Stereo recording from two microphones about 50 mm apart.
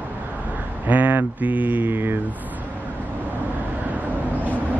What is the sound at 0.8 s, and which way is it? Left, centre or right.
Mantra, right.